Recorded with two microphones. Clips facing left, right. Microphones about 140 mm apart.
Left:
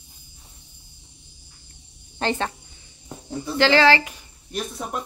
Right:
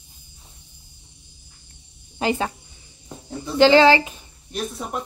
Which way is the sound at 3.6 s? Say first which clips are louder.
Right 4 dB; 20° right (ahead or behind).